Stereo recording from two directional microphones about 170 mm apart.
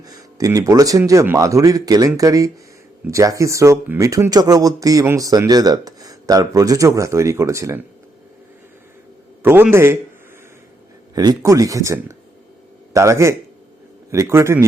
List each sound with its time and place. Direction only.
0.0 s speech: 20° right (ahead or behind)
9.4 s a man's voice: 10° right (ahead or behind)
11.1 s a man's voice: 25° right (ahead or behind)